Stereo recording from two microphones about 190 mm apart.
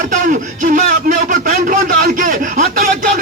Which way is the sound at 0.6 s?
40° right (ahead or behind).